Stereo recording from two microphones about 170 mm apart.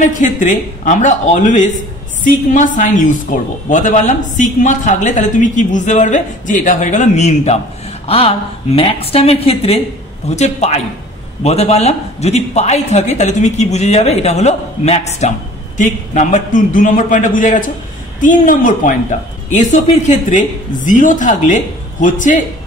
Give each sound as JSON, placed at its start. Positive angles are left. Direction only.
{"t": 0.0, "sound": "a woman's voice", "side_deg": 50}